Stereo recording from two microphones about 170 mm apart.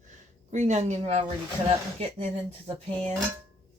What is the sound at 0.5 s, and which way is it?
Speech, 45° right (ahead or behind).